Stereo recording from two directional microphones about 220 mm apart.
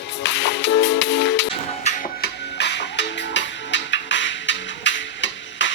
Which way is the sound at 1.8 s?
30° left (ahead or behind).